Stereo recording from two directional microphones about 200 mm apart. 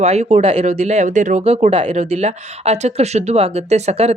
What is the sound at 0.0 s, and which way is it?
Speech, 35° right (ahead or behind).